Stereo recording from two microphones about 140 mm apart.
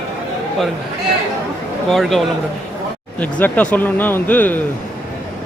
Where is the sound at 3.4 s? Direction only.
10° left (ahead or behind).